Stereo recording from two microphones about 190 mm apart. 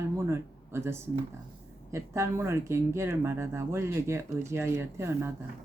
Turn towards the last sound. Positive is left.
turn(degrees=-15)  # may be behind; listen again after turning